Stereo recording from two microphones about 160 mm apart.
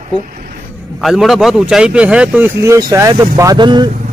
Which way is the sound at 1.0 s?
Centre (ahead or behind).